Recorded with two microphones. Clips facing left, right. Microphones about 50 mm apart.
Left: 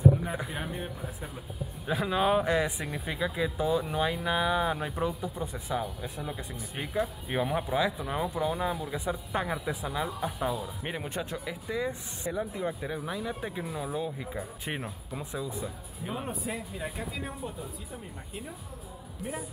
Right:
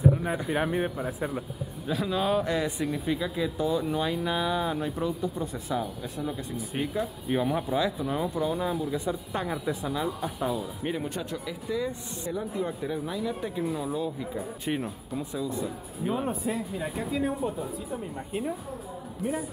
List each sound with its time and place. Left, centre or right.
0.5 s speech: right
1.9 s speech: left
6.5 s speech: centre
6.9 s speech: centre
10.8 s speech: centre
15.5 s speech: centre